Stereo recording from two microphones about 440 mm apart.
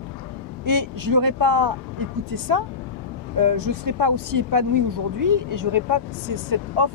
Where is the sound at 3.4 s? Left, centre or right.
Right.